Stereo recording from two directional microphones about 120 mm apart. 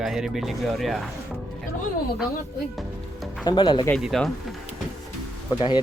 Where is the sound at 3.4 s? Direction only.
40° left (ahead or behind).